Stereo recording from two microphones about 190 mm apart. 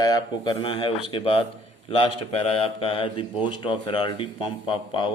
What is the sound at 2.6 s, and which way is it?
Speech, 30° left (ahead or behind).